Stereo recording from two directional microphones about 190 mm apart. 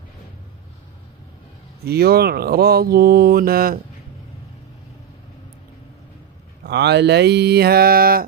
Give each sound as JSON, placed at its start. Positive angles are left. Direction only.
{"t": 1.9, "sound": "speech", "side_deg": -55}
{"t": 6.6, "sound": "speech", "side_deg": -60}